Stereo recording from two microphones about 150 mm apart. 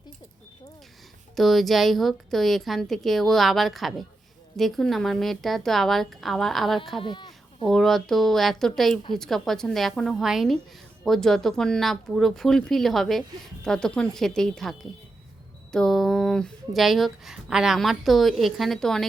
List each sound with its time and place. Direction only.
1.4 s speech: centre (ahead or behind)
7.0 s a sound: 30° left (ahead or behind)
7.7 s speech: centre (ahead or behind)